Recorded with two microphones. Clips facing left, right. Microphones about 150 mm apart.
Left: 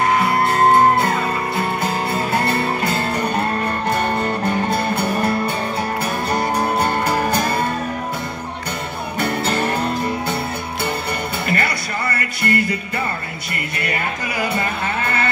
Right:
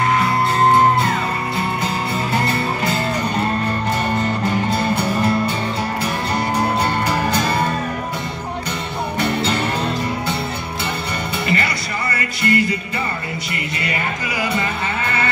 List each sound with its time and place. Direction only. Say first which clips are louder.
2.3 s music: even; 55° left (ahead or behind)
4.6 s music: even; 55° left (ahead or behind)
6.3 s music: even; 50° left (ahead or behind)
9.2 s music: left 1 dB; 50° left (ahead or behind)
11.4 s music: right 1 dB; 55° left (ahead or behind)
13.7 s music: left 1 dB; 55° left (ahead or behind)